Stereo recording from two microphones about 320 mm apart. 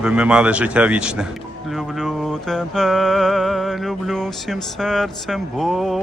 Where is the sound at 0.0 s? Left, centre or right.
Centre.